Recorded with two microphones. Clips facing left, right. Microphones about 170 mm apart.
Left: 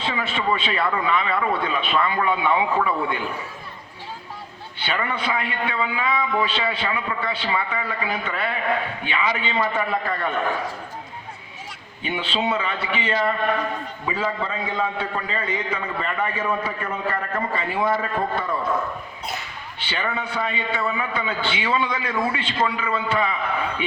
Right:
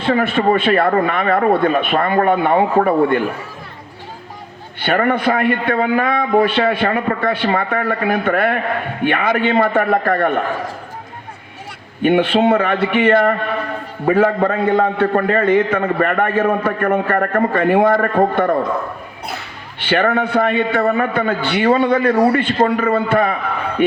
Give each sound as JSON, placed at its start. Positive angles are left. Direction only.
{"t": 0.0, "sound": "a man's voice", "side_deg": -55}
{"t": 4.8, "sound": "a man's voice", "side_deg": -55}
{"t": 12.0, "sound": "a man's voice", "side_deg": -60}
{"t": 19.8, "sound": "a man's voice", "side_deg": -60}